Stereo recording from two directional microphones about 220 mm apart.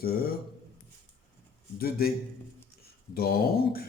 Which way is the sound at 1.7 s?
45° left (ahead or behind).